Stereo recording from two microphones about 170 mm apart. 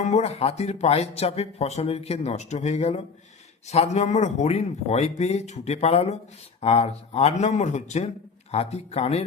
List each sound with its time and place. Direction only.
0.0 s speech: 40° left (ahead or behind)